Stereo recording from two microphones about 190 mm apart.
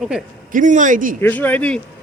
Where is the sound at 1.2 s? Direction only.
10° left (ahead or behind).